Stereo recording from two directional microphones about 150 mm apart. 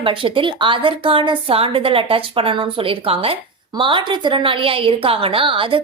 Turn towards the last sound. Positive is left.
turn(degrees=-35)  # may be behind; listen again after turning